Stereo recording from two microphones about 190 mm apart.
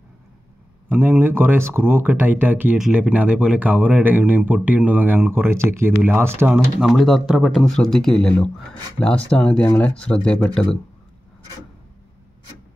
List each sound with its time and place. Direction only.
0.8 s speech: 10° right (ahead or behind); by 10.8 s 5° left (ahead or behind)